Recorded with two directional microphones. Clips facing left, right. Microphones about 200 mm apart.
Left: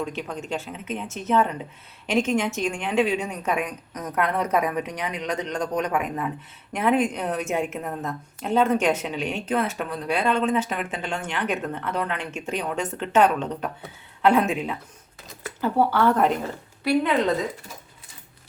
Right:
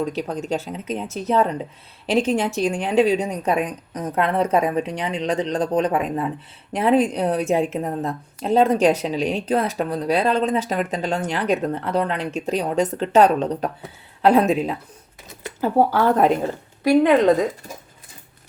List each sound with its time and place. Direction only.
0.0 s a woman's voice: 40° right (ahead or behind)
16.8 s a woman's voice: 50° right (ahead or behind)